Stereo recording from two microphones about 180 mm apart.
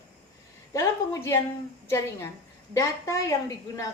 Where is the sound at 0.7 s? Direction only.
20° left (ahead or behind).